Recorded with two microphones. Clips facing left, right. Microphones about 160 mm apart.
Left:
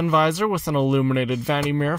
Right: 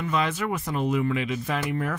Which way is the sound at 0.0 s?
70° left (ahead or behind).